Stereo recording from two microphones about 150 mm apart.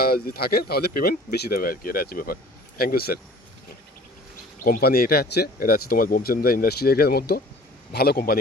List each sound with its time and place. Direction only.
0.0 s speech: 90° left
4.6 s speech: 80° left